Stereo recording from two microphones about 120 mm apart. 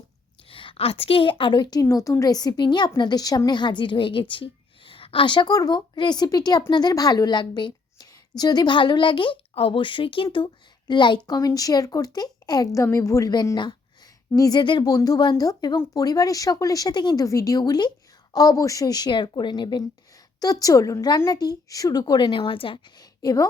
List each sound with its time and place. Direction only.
0.4 s a woman's voice: 45° left (ahead or behind)
23.0 s a woman's voice: 30° left (ahead or behind)